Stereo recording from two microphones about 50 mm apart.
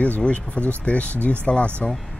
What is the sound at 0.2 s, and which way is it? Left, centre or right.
Speech, left.